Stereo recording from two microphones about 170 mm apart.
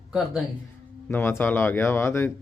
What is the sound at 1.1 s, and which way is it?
Speech, 10° left (ahead or behind).